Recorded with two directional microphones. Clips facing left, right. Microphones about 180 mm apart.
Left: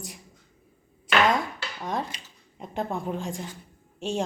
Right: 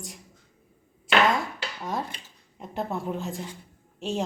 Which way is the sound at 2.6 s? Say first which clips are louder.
Even; 5° right (ahead or behind).